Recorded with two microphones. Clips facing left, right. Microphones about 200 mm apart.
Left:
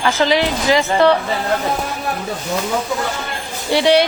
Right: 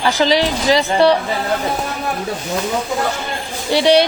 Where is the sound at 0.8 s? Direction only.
15° right (ahead or behind).